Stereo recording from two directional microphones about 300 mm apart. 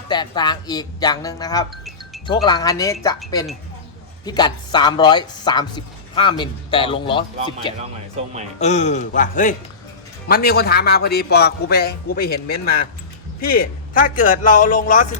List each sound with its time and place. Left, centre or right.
0.1 s speech: centre
4.3 s a man's voice: centre